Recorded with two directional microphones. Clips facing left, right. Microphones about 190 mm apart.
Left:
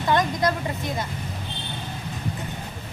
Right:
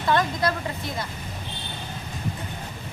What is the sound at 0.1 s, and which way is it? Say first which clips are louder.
Speech: left 1 dB; 20° left (ahead or behind).